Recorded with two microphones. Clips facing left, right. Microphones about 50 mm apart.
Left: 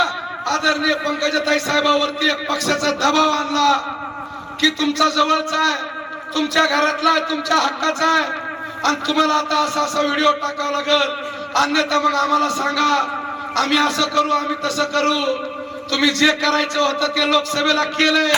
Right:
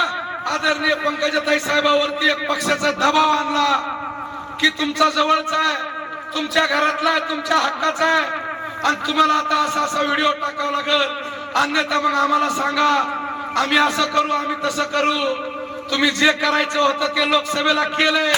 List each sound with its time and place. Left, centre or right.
0.0 s a man's voice: centre